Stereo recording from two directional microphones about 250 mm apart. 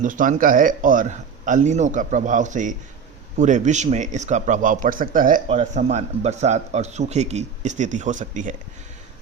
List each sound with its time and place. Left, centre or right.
0.0 s a man's voice: right